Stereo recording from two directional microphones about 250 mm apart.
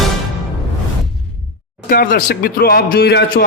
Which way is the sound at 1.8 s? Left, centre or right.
Left.